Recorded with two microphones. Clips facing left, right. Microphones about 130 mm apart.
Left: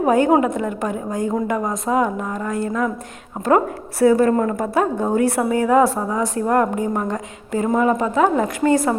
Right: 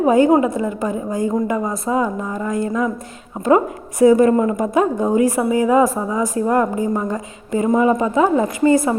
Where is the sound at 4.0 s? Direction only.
15° right (ahead or behind).